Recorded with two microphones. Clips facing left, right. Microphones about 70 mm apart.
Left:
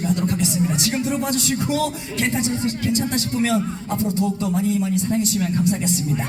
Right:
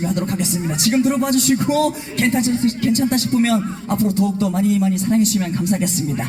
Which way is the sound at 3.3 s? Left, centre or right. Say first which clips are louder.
Right 4 dB; right.